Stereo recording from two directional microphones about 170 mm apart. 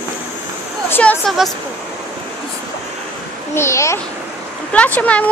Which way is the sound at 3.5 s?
15° left (ahead or behind).